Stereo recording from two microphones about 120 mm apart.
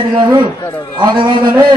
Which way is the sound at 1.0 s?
40° right (ahead or behind).